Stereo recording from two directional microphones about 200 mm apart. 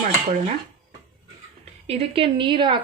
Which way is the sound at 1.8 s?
30° right (ahead or behind).